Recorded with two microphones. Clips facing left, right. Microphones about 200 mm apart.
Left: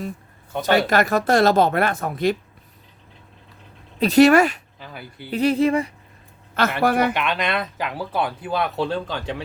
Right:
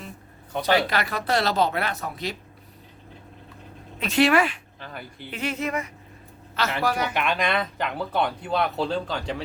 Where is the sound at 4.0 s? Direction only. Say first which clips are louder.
Left 7 dB; 40° left (ahead or behind).